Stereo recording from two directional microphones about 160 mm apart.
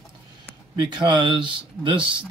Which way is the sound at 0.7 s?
30° right (ahead or behind).